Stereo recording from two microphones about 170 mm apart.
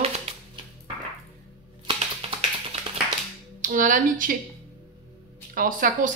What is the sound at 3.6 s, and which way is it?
Speech, 50° right (ahead or behind).